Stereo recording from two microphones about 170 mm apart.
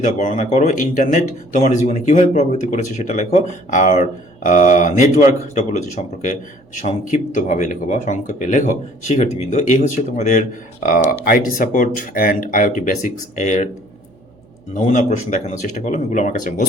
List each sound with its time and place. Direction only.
0.0 s speech: 50° left (ahead or behind)
14.7 s speech: 45° left (ahead or behind)